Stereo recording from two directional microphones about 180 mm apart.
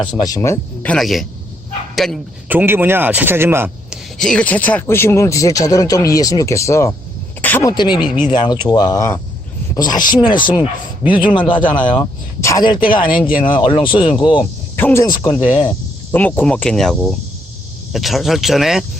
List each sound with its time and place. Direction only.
0.0 s speech: 25° left (ahead or behind); by 2.2 s centre (ahead or behind)
2.5 s a man's voice: 10° right (ahead or behind)
4.2 s speech: 5° left (ahead or behind); by 8.0 s 25° left (ahead or behind)
8.0 s a man's voice: 10° right (ahead or behind)
8.3 s speech: 25° left (ahead or behind)
14.8 s speech: 15° left (ahead or behind)